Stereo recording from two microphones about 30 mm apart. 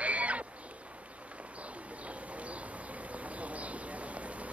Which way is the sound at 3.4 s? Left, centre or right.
Right.